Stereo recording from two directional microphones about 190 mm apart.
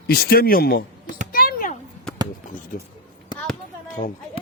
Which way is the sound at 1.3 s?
45° left (ahead or behind).